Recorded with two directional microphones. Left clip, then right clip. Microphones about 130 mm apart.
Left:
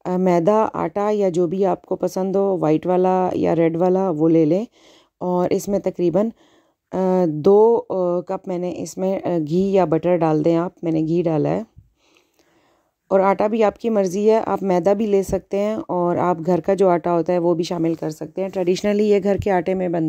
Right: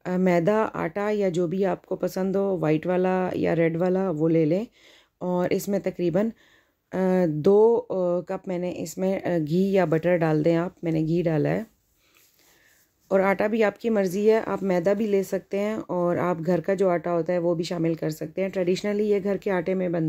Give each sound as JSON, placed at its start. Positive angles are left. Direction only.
{"t": 0.0, "sound": "speech", "side_deg": 55}
{"t": 13.1, "sound": "speech", "side_deg": 50}